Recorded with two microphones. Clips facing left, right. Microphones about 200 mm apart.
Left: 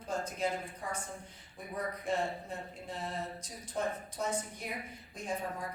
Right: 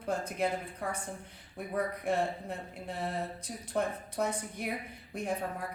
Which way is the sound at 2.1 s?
60° right (ahead or behind).